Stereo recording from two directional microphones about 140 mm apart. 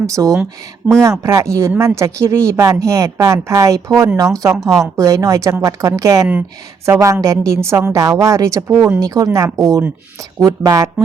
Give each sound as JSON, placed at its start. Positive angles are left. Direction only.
{"t": 0.0, "sound": "a woman's voice", "side_deg": -25}